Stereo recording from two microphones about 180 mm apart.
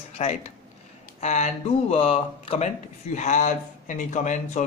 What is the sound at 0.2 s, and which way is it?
A man's voice, 40° left (ahead or behind).